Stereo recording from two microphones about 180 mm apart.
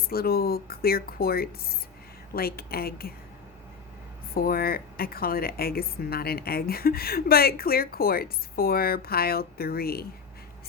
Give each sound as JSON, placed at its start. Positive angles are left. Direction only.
{"t": 0.1, "sound": "a woman's voice", "side_deg": 55}
{"t": 4.4, "sound": "a woman's voice", "side_deg": 55}